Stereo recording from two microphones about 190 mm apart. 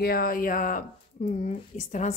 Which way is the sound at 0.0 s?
50° left (ahead or behind).